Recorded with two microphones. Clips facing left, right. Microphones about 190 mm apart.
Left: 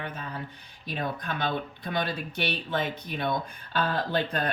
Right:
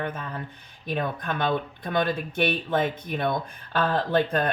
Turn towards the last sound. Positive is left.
turn(degrees=-50)  # may be behind; listen again after turning